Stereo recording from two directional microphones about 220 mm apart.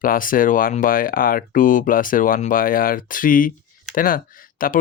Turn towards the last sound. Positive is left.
turn(degrees=40)  # may be behind; listen again after turning